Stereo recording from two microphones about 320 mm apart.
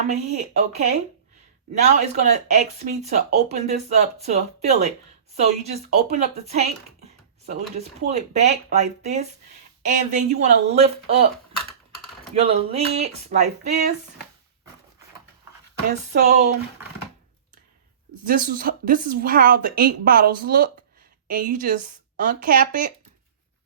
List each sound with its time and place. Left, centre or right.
0.0 s speech: right
12.3 s speech: centre
16.1 s speech: right
18.3 s speech: right